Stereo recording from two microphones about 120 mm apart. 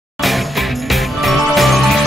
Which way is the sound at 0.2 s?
Centre (ahead or behind).